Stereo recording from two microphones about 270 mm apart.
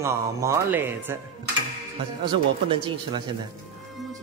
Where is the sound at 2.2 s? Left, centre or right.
Centre.